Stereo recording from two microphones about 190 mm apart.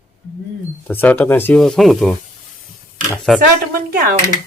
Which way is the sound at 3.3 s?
Centre (ahead or behind).